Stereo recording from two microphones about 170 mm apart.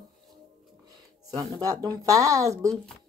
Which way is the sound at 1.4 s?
20° right (ahead or behind).